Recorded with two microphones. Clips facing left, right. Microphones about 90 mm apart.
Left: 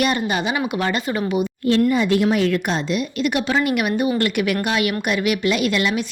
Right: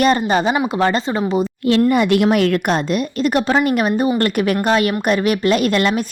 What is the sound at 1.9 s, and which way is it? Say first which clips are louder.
A woman's voice: right 3 dB; 65° right (ahead or behind).